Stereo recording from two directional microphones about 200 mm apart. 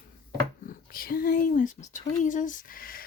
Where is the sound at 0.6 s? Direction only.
45° left (ahead or behind).